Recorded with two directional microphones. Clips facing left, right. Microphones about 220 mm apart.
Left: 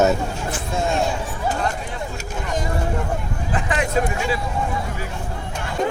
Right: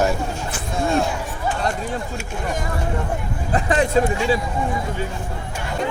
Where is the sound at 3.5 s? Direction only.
35° right (ahead or behind).